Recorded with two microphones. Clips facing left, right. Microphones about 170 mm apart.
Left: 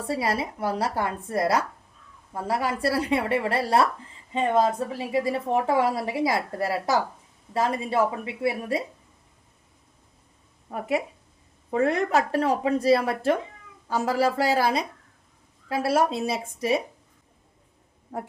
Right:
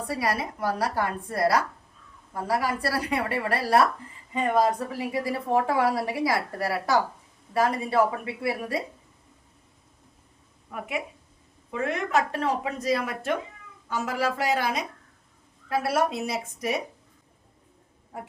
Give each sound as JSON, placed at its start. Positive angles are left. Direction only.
{"t": 0.1, "sound": "a woman's voice", "side_deg": 25}
{"t": 10.7, "sound": "a woman's voice", "side_deg": 35}